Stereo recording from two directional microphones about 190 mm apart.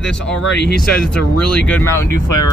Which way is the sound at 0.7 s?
5° left (ahead or behind).